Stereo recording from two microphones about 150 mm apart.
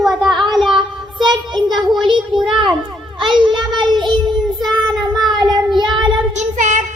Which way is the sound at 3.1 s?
30° right (ahead or behind).